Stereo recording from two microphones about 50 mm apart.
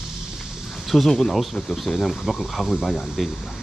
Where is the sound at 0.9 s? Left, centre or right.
Centre.